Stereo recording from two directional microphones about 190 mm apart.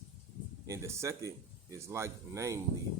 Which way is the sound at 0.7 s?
15° right (ahead or behind).